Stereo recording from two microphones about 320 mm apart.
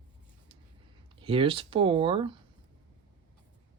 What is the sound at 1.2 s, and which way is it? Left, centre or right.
Speech, centre.